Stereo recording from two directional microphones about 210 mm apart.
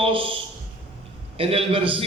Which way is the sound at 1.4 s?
25° right (ahead or behind).